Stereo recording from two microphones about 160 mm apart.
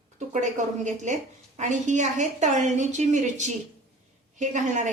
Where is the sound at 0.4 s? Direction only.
50° right (ahead or behind).